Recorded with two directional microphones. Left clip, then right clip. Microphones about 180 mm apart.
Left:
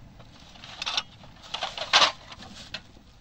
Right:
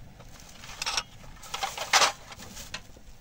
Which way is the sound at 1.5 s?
90° right.